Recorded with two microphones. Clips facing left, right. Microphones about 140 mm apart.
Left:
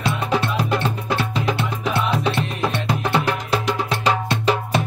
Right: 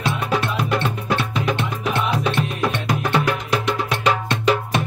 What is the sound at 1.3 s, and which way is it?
Music, 30° left (ahead or behind).